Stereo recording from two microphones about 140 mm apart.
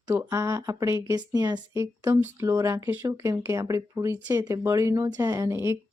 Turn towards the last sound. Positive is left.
turn(degrees=-20)  # may be behind; listen again after turning